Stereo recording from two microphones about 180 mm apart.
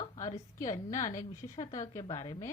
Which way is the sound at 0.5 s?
20° left (ahead or behind).